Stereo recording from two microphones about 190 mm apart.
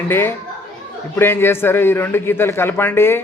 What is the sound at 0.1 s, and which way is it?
A man's voice, 10° left (ahead or behind).